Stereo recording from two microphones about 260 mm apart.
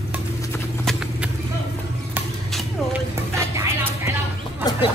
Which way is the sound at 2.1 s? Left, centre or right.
Centre.